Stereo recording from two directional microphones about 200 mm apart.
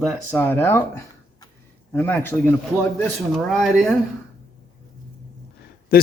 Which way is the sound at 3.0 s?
Centre (ahead or behind).